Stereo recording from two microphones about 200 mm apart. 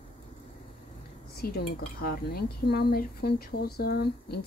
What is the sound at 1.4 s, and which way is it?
Speech, 50° left (ahead or behind).